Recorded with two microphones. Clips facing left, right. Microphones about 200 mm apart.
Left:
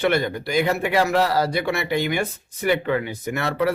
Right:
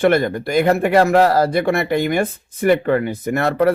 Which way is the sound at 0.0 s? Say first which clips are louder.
Right 6 dB; 50° right (ahead or behind).